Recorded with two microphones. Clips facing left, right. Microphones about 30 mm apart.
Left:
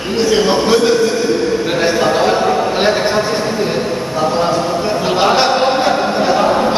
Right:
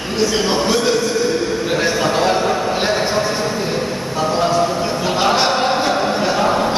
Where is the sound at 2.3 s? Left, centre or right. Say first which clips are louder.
Left 4 dB; centre.